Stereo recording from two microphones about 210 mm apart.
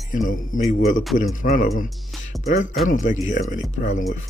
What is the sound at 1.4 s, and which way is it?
Speech, 40° left (ahead or behind).